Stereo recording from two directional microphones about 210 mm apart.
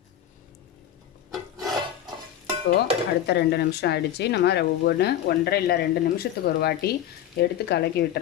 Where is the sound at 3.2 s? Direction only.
50° left (ahead or behind).